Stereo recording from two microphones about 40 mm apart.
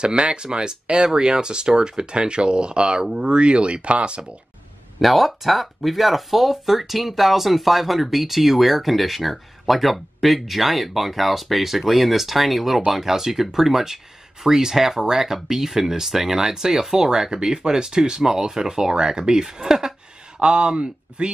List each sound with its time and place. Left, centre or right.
0.0 s speech: right
5.0 s speech: centre; by 21.3 s right